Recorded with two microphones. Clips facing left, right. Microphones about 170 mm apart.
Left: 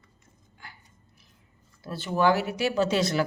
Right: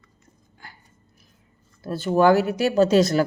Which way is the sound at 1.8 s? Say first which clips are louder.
Right 6 dB; 45° right (ahead or behind).